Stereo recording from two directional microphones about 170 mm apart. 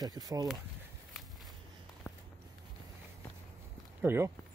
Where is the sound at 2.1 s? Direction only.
10° left (ahead or behind).